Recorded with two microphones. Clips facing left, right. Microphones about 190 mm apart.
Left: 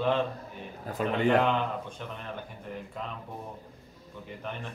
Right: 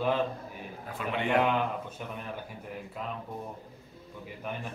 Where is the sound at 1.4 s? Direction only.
10° right (ahead or behind).